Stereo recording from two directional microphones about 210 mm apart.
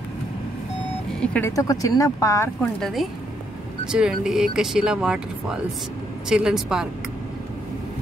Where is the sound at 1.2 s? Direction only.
10° left (ahead or behind).